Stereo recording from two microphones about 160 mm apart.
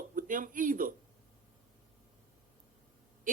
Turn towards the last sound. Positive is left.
turn(degrees=-55)  # may be behind; listen again after turning